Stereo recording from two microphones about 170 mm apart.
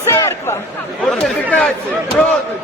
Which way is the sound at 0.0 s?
15° left (ahead or behind).